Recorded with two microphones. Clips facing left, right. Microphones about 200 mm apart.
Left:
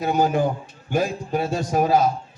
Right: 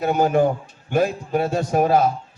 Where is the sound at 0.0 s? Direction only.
55° right (ahead or behind).